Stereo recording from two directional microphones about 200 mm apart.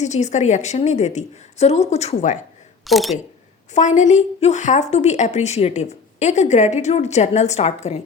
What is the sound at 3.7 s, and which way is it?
A woman's voice, 35° left (ahead or behind).